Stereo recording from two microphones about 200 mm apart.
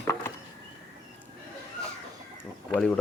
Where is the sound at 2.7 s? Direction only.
5° left (ahead or behind).